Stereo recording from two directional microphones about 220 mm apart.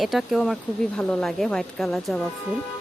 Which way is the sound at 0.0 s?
Centre (ahead or behind).